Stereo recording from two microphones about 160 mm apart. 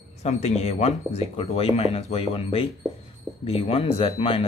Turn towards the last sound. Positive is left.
turn(degrees=35)  # may be behind; listen again after turning